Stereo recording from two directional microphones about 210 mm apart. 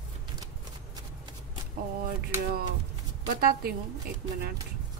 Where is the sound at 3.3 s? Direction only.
45° right (ahead or behind).